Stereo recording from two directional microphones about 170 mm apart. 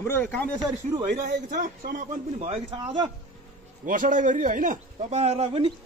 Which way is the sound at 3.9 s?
50° right (ahead or behind).